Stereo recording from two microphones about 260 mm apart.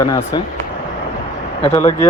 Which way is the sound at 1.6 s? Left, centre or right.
Centre.